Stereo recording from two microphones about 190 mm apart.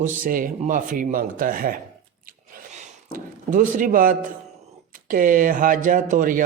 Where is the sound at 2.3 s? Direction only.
40° right (ahead or behind).